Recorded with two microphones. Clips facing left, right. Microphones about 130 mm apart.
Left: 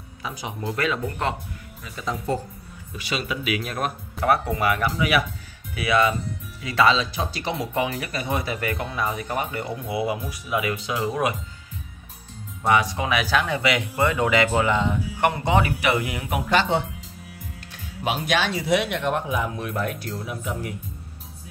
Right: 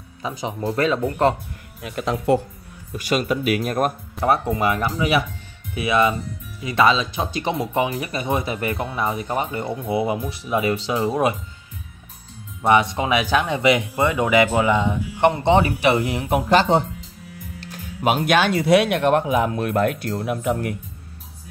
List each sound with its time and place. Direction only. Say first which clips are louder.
0.2 s speech: right 5 dB; 25° right (ahead or behind)
1.8 s speech: right 6 dB; 65° right (ahead or behind)
3.0 s speech: right 7 dB; 45° right (ahead or behind)
4.2 s speech: right 2 dB; 25° right (ahead or behind)
12.6 s speech: right 4 dB; 25° right (ahead or behind); by 16.8 s 40° right (ahead or behind)
18.0 s speech: right 6 dB; 55° right (ahead or behind)